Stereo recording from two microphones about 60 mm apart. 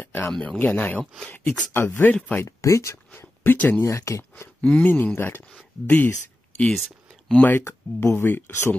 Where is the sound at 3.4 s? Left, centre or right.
Left.